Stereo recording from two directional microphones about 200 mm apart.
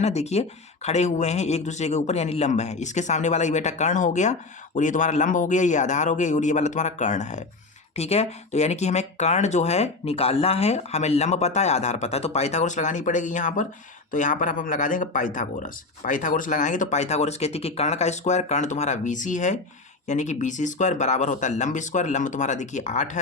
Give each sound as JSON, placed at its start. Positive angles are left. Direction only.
{"t": 0.0, "sound": "speech", "side_deg": 35}